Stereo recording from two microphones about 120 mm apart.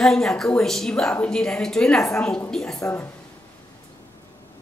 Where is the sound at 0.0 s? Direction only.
5° left (ahead or behind).